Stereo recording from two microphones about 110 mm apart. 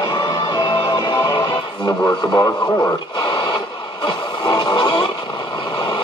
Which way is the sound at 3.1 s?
45° left (ahead or behind).